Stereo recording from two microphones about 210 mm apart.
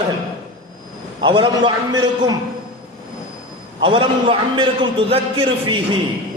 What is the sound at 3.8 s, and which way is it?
A man's voice, 25° right (ahead or behind).